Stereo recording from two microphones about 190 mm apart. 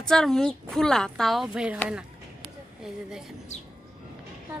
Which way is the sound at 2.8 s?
5° right (ahead or behind).